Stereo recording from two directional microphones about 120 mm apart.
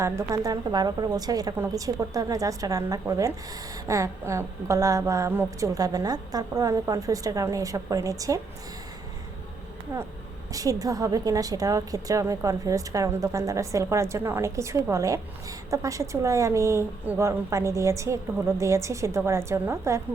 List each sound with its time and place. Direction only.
0.0 s a woman's voice: 25° right (ahead or behind)
9.9 s a woman's voice: 25° right (ahead or behind)